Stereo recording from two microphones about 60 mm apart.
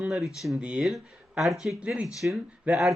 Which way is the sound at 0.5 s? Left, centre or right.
Centre.